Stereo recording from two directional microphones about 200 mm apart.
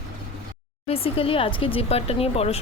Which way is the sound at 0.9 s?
30° left (ahead or behind).